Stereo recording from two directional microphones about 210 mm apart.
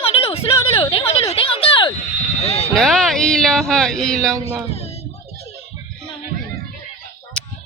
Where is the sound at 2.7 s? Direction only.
Centre (ahead or behind).